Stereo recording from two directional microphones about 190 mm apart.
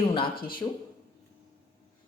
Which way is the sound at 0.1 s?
25° left (ahead or behind).